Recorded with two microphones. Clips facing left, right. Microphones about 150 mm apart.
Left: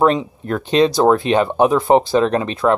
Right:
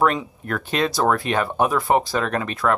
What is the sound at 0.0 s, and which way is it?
Speech, 25° left (ahead or behind).